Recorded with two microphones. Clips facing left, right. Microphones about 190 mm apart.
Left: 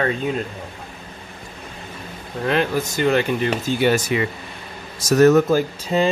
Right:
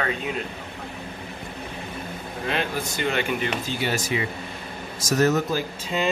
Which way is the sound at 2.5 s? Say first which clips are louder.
Left 7 dB; 45° left (ahead or behind).